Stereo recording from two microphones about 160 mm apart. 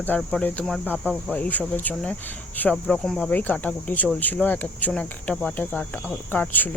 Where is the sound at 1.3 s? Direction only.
10° left (ahead or behind).